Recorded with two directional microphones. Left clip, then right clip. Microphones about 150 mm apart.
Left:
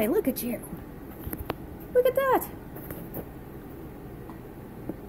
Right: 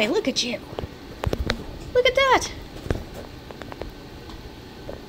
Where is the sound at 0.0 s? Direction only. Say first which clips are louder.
Right 4 dB; 5° right (ahead or behind).